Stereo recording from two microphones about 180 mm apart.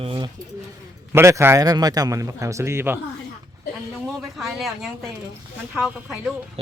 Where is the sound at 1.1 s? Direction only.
15° right (ahead or behind).